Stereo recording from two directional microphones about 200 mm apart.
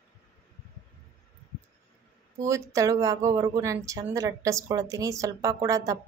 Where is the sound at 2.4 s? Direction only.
15° right (ahead or behind).